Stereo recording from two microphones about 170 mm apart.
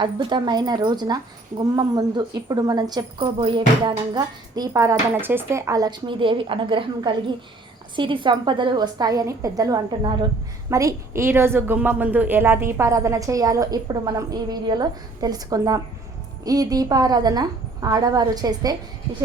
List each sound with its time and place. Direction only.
0.0 s speech: 25° right (ahead or behind)